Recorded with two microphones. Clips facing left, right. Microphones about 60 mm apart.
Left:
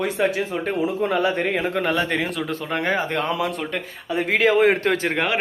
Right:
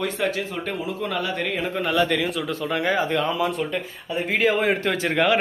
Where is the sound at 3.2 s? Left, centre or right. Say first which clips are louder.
Right 1 dB; left.